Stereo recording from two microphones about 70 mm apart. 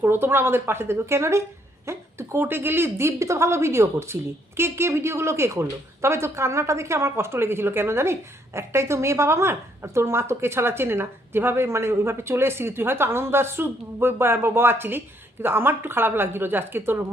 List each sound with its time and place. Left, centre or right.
0.0 s a woman's voice: right